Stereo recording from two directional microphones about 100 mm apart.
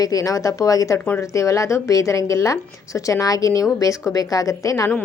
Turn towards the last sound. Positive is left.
turn(degrees=35)  # may be behind; listen again after turning